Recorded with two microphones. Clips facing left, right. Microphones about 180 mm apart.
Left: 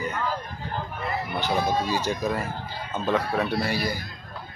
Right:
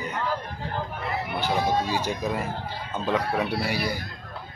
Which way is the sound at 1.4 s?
15° right (ahead or behind).